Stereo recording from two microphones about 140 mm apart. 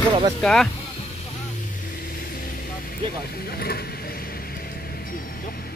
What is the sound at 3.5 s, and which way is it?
Speech, 90° left.